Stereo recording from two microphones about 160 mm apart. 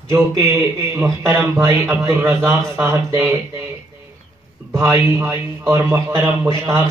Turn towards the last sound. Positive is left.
turn(degrees=-15)  # may be behind; listen again after turning